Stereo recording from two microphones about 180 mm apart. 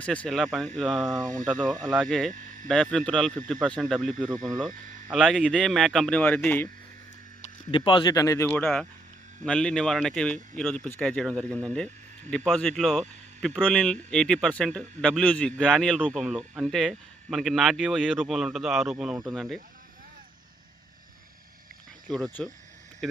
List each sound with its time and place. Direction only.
0.0 s speech: 5° left (ahead or behind)
7.7 s speech: 25° left (ahead or behind); by 19.5 s centre (ahead or behind)
22.1 s speech: centre (ahead or behind)